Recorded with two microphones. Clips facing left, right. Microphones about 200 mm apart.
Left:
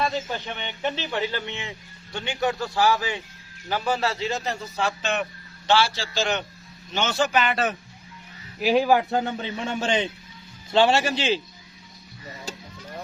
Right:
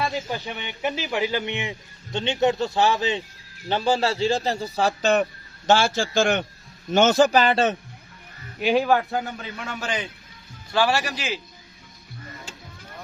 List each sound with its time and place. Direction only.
0.0 s a man's voice: 10° right (ahead or behind); by 7.8 s 25° right (ahead or behind)
8.5 s speech: centre (ahead or behind)
8.9 s speech: 20° left (ahead or behind)
12.5 s a sound: 40° left (ahead or behind)